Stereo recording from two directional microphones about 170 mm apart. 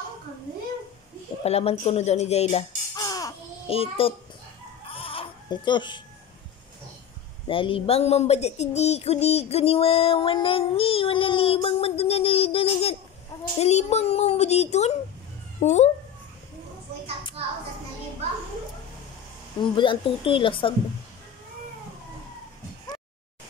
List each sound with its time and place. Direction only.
1.4 s speech: 35° left (ahead or behind)
3.0 s a sound: 20° left (ahead or behind)
3.6 s speech: 35° left (ahead or behind)
4.8 s goat: 35° left (ahead or behind)
7.4 s a sound: 30° left (ahead or behind)
13.6 s speech: 40° left (ahead or behind)
19.6 s speech: 30° left (ahead or behind)